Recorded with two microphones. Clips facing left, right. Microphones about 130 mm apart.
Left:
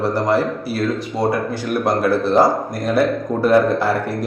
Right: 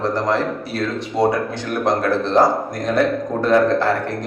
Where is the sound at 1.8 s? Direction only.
10° left (ahead or behind).